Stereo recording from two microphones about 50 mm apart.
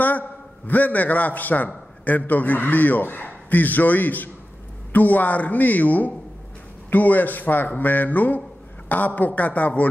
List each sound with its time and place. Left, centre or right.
0.7 s a man's voice: left